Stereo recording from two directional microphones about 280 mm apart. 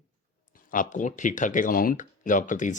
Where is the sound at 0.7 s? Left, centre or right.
Left.